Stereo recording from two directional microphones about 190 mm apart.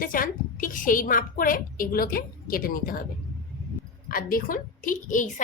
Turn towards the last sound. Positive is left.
turn(degrees=45)  # may be behind; listen again after turning